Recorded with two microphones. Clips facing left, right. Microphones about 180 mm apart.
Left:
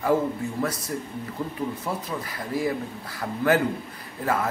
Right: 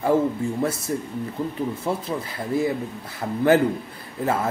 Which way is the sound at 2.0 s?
25° right (ahead or behind).